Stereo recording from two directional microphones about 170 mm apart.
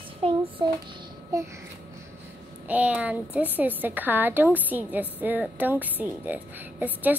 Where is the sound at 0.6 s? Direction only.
25° right (ahead or behind).